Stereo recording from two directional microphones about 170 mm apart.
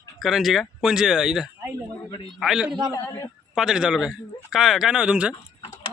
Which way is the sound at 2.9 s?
20° left (ahead or behind).